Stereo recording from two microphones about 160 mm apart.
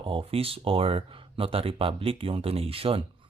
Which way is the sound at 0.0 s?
35° right (ahead or behind).